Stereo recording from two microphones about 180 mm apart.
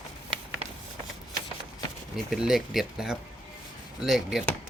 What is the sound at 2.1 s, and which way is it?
Speech, centre (ahead or behind).